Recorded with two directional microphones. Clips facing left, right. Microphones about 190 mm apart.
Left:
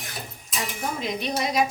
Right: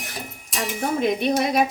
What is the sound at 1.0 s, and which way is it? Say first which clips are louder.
Speech: right 7 dB; 55° right (ahead or behind).